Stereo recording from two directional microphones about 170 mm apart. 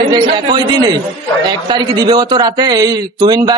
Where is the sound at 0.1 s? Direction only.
25° right (ahead or behind).